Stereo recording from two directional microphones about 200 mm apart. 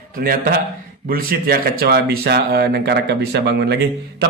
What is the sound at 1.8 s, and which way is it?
Speech, 50° right (ahead or behind).